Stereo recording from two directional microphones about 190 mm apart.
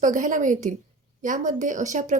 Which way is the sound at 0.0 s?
40° right (ahead or behind).